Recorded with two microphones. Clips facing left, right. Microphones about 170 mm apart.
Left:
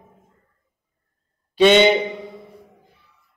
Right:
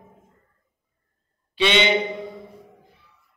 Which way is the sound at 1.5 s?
45° left (ahead or behind).